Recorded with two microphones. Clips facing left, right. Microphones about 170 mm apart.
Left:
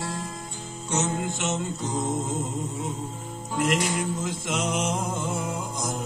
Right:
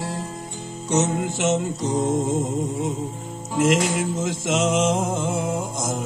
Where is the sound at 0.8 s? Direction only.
70° right (ahead or behind).